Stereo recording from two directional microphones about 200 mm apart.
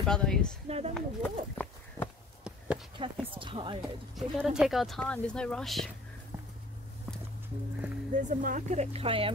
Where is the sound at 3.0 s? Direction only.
25° right (ahead or behind).